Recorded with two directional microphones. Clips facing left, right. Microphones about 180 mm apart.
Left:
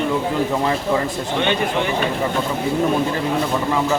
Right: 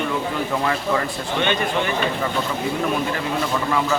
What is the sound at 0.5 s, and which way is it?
Speech, 20° left (ahead or behind).